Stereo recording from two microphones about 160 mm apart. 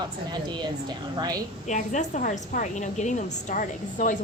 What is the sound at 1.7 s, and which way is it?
A woman's voice, 50° left (ahead or behind).